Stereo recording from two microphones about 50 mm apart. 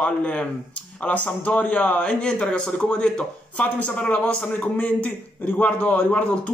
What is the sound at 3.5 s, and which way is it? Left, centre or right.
A man's voice, left.